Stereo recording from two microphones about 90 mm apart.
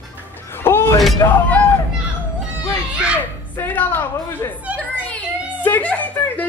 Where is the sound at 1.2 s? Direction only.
35° left (ahead or behind).